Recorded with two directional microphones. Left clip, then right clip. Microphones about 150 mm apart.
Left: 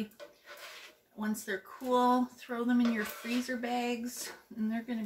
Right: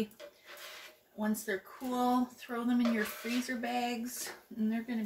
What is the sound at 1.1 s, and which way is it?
Speech, 20° left (ahead or behind).